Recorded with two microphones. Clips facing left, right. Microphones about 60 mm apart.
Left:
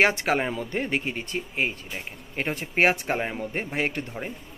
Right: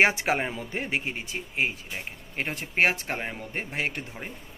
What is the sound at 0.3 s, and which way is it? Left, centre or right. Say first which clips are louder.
Speech: left 2 dB; centre.